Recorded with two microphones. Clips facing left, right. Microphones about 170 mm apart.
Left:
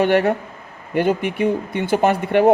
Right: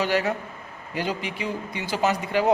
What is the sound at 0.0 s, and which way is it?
A man's voice, 60° left (ahead or behind).